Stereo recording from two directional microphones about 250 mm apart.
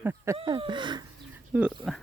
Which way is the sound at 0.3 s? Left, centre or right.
Centre.